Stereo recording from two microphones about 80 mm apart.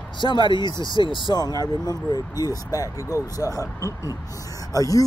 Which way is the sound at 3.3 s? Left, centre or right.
Left.